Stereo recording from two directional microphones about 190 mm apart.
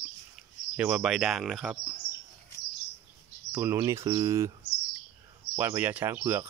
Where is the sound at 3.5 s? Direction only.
15° right (ahead or behind).